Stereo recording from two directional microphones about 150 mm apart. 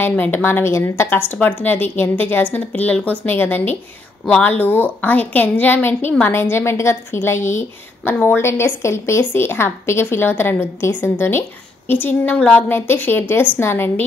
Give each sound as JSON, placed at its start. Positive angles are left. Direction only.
{"t": 0.0, "sound": "a woman's voice", "side_deg": 15}